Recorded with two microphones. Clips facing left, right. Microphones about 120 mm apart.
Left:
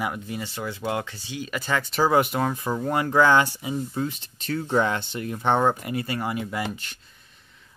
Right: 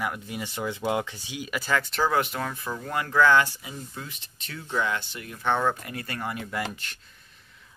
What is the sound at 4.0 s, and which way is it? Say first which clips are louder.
Speech: left 12 dB; 35° left (ahead or behind).